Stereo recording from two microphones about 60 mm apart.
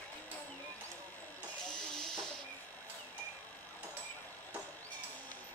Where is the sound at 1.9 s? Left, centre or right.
Centre.